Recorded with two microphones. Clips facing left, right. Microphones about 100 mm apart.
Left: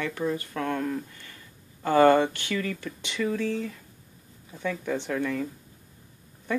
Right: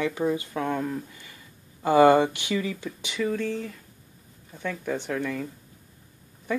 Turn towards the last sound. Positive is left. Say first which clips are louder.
# even
turn(degrees=-5)  # may be behind; listen again after turning